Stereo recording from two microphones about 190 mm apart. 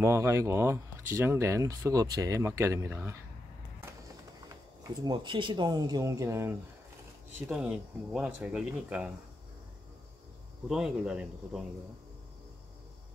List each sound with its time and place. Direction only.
0.0 s speech: 15° right (ahead or behind)
5.0 s speech: 25° right (ahead or behind); by 9.1 s 5° right (ahead or behind)
10.7 s speech: 5° right (ahead or behind)